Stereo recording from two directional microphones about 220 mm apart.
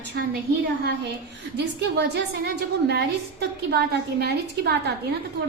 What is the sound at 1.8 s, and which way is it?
A woman's voice, 50° right (ahead or behind).